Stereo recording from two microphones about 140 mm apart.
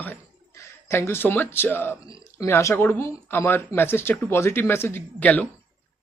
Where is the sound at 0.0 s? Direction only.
15° left (ahead or behind).